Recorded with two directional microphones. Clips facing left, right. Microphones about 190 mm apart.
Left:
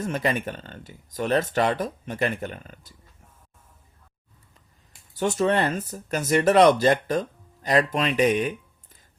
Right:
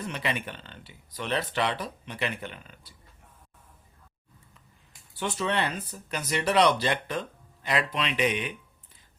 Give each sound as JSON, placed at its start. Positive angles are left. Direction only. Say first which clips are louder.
{"t": 0.0, "sound": "speech", "louder": "left 6 dB", "side_deg": 45}
{"t": 5.1, "sound": "speech", "louder": "left 7 dB", "side_deg": 45}